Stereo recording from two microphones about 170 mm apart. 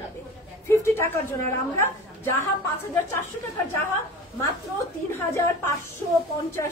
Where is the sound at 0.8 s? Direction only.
15° left (ahead or behind).